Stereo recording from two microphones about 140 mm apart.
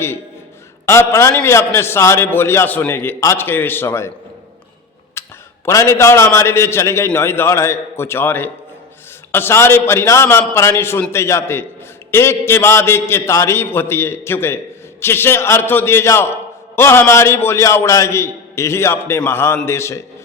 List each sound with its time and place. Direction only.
0.9 s a man's voice: 20° left (ahead or behind)
5.2 s a sound: 20° left (ahead or behind)
5.6 s a man's voice: 20° left (ahead or behind)